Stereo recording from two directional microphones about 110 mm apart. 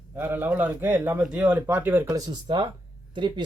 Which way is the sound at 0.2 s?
20° right (ahead or behind).